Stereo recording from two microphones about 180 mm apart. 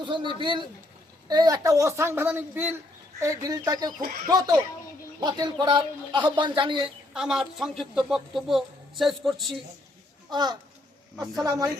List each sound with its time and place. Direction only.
0.0 s a man's voice: 25° right (ahead or behind)
7.1 s speech: 5° right (ahead or behind)
10.2 s a man's voice: 25° right (ahead or behind)